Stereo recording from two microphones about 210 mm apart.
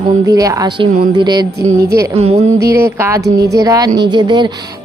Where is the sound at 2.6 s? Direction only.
15° right (ahead or behind).